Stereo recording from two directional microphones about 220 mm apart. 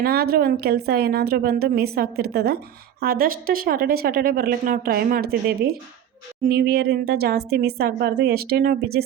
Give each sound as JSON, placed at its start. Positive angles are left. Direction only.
{"t": 0.0, "sound": "speech", "side_deg": -45}